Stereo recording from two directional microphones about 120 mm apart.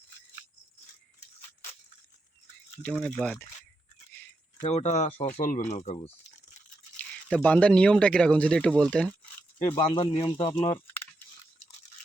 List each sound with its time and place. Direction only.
2.8 s speech: 10° left (ahead or behind)
4.6 s speech: 70° left (ahead or behind)
7.0 s speech: 10° left (ahead or behind)
9.6 s speech: 45° left (ahead or behind)